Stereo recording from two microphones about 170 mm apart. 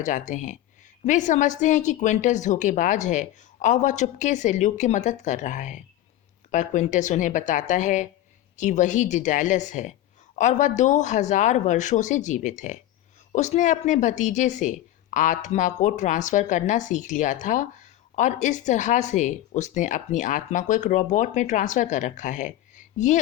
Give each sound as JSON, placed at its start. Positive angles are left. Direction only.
{"t": 0.0, "sound": "a woman's voice", "side_deg": 45}